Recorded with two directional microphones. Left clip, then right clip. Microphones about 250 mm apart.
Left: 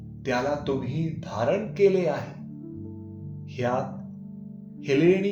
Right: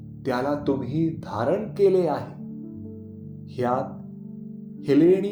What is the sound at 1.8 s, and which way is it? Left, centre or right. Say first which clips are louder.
Speech: right 2 dB; right.